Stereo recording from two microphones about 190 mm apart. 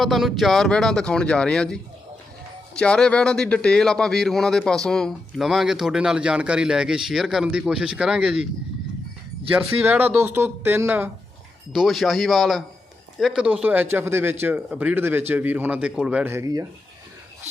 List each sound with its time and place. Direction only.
0.0 s speech: centre (ahead or behind)
9.5 s speech: 10° right (ahead or behind)
17.5 s cricket: 35° right (ahead or behind)